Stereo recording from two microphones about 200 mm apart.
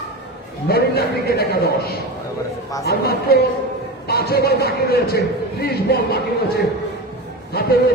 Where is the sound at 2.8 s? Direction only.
50° left (ahead or behind).